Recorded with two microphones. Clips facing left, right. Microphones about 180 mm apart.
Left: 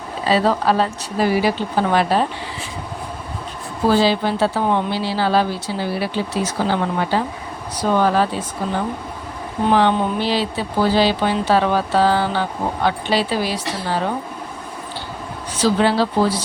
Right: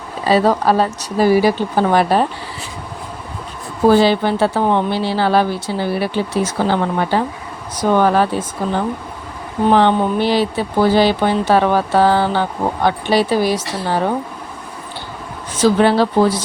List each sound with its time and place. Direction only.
0.3 s speech: 45° right (ahead or behind)
3.8 s speech: 55° right (ahead or behind)
9.7 s speech: 55° right (ahead or behind)
15.5 s speech: 55° right (ahead or behind)